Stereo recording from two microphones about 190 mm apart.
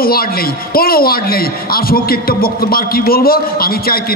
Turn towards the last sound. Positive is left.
turn(degrees=50)  # may be behind; listen again after turning